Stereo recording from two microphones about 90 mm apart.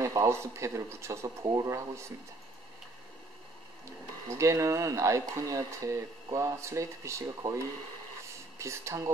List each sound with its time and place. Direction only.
0.0 s speech: 40° right (ahead or behind)
4.3 s speech: 35° right (ahead or behind)
8.5 s speech: 35° right (ahead or behind)